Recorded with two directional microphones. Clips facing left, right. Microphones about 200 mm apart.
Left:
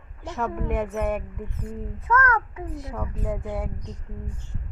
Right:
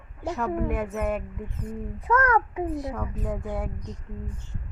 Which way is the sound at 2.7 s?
Centre (ahead or behind).